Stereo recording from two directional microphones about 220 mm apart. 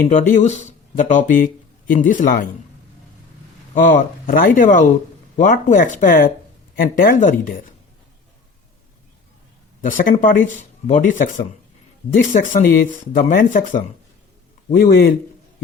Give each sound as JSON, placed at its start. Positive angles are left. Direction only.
{"t": 0.1, "sound": "speech", "side_deg": 30}
{"t": 3.9, "sound": "speech", "side_deg": 40}
{"t": 9.8, "sound": "speech", "side_deg": 40}